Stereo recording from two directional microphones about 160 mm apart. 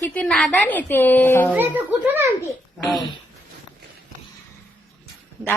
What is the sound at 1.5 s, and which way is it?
Speech, 10° right (ahead or behind).